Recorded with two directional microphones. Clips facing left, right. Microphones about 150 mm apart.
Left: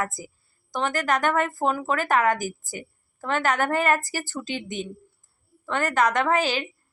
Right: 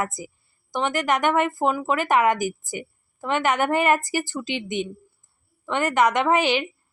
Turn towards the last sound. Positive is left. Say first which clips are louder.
# right 3 dB
turn(degrees=-15)  # may be behind; listen again after turning